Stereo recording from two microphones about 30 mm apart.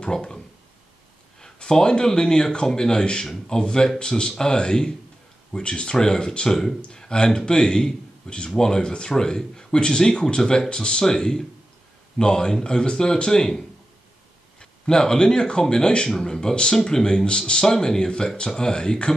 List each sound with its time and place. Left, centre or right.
0.0 s speech: left
1.4 s a sound: left
2.1 s speech: left
9.1 s speech: centre
17.5 s speech: centre